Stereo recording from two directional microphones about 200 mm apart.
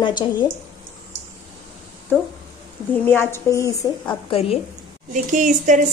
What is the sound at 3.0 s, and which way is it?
Speech, 10° left (ahead or behind).